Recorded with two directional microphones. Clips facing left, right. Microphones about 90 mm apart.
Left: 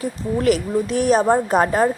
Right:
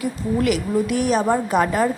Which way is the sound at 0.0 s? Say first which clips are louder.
Left 1 dB; 35° left (ahead or behind).